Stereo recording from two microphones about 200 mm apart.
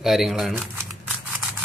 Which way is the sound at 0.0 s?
Centre (ahead or behind).